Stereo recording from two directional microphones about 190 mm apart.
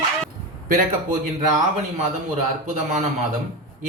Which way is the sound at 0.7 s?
45° right (ahead or behind).